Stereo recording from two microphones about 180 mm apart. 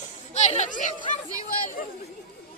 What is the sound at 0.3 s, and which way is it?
Speech, 40° left (ahead or behind).